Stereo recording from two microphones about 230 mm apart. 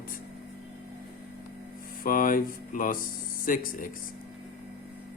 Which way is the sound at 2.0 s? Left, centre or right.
Left.